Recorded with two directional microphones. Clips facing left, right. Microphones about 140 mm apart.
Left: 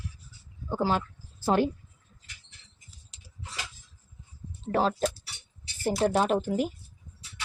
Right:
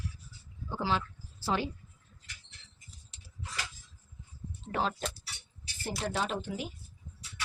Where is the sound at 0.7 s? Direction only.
45° left (ahead or behind).